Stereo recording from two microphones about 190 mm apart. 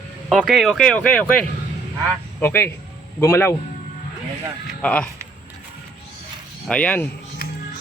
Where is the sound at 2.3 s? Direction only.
10° left (ahead or behind).